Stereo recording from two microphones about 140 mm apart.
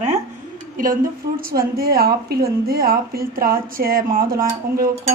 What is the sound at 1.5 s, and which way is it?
A woman's voice, 90° right.